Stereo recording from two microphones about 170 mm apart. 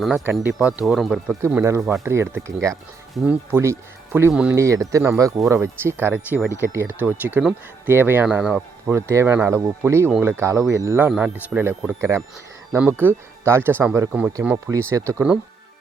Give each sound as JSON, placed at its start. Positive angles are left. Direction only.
{"t": 0.0, "sound": "speech", "side_deg": -5}
{"t": 1.5, "sound": "speech", "side_deg": -10}
{"t": 4.5, "sound": "speech", "side_deg": -20}